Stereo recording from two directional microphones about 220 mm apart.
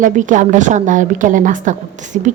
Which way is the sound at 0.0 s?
35° right (ahead or behind).